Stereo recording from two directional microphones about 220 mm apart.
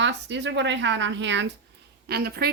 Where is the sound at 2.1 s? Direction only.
45° right (ahead or behind).